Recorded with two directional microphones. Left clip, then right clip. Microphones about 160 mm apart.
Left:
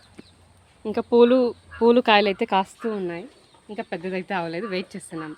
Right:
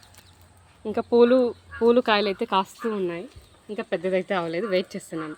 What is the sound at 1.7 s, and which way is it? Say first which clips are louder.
Speech: left 4 dB; 50° left (ahead or behind).